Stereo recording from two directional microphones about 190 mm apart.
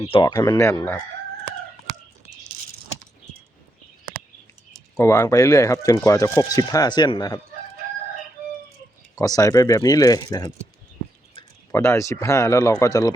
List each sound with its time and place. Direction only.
0.0 s speech: 25° left (ahead or behind)
4.9 s speech: 15° left (ahead or behind)
9.1 s speech: 20° left (ahead or behind)
11.7 s speech: 15° left (ahead or behind)